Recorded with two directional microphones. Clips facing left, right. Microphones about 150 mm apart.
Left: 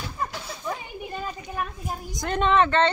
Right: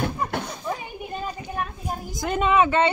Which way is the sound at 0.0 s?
55° right (ahead or behind).